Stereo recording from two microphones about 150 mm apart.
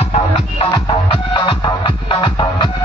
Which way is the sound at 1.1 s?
35° left (ahead or behind).